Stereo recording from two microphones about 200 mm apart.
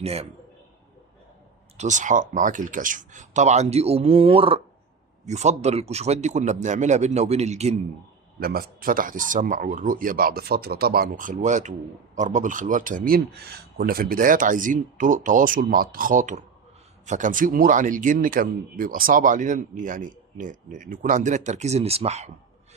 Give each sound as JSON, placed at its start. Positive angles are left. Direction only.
{"t": 0.0, "sound": "speech", "side_deg": -30}
{"t": 1.8, "sound": "speech", "side_deg": -40}
{"t": 8.4, "sound": "speech", "side_deg": -50}